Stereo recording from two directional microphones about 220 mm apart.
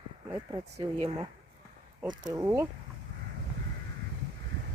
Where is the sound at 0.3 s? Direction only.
20° right (ahead or behind).